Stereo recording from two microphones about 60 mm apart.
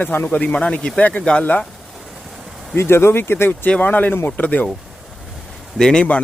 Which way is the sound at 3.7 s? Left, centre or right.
Left.